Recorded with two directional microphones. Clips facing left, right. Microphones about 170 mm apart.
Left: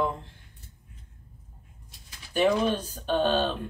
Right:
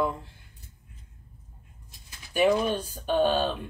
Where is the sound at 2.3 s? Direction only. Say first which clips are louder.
Even; 10° right (ahead or behind).